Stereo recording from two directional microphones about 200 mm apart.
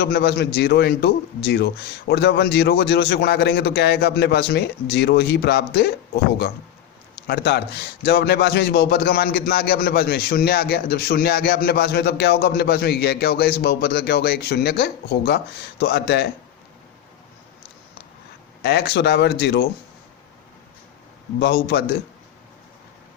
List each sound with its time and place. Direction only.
0.0 s a man's voice: 55° left (ahead or behind)
7.3 s a man's voice: 55° left (ahead or behind)
18.6 s a man's voice: 55° left (ahead or behind)
21.3 s a man's voice: 55° left (ahead or behind)